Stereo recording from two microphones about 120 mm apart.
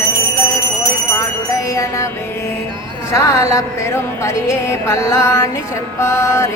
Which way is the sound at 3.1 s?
25° left (ahead or behind).